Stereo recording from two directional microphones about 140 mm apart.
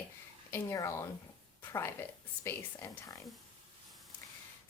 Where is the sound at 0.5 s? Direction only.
20° left (ahead or behind).